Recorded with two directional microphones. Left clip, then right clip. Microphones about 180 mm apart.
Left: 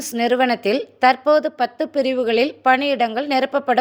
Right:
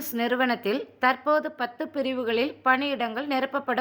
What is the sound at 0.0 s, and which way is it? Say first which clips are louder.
A woman's voice: left 8 dB; 20° left (ahead or behind).